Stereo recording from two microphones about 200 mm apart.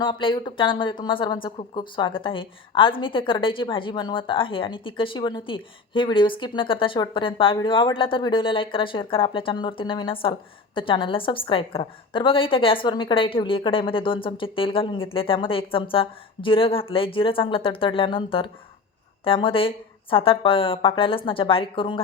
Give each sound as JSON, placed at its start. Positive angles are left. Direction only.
{"t": 0.0, "sound": "a woman's voice", "side_deg": 25}